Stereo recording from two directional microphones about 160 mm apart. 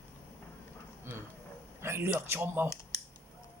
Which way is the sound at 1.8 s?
15° right (ahead or behind).